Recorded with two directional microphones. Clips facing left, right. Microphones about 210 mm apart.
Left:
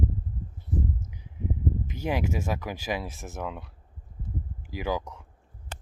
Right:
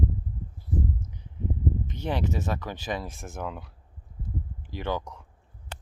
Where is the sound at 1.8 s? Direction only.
5° left (ahead or behind).